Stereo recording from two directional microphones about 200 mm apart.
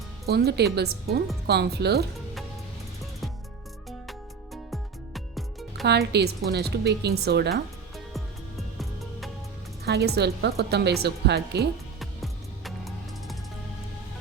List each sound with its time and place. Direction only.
0.3 s a woman's voice: 55° right (ahead or behind)
4.5 s music: centre (ahead or behind)
5.8 s a woman's voice: 55° right (ahead or behind)
9.8 s a woman's voice: 55° right (ahead or behind)
11.9 s music: centre (ahead or behind)